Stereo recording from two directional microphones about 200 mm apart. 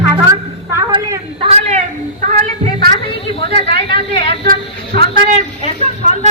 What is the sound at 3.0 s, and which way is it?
Speech, 30° left (ahead or behind).